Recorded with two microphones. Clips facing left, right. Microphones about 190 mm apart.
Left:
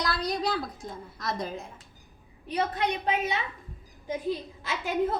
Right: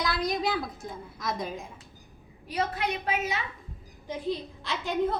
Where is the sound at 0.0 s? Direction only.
Centre (ahead or behind).